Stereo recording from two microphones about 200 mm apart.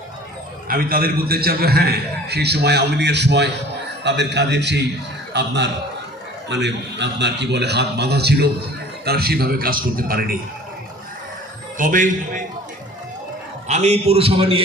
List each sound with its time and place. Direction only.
0.7 s a man's voice: 45° right (ahead or behind)
11.8 s a man's voice: 40° right (ahead or behind)
13.7 s a man's voice: 35° right (ahead or behind)